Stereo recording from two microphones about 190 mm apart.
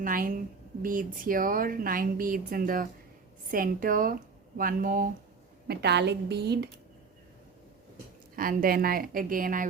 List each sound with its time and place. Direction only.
0.0 s a woman's voice: 45° right (ahead or behind)
5.6 s a woman's voice: 60° right (ahead or behind)
8.4 s a woman's voice: 50° right (ahead or behind)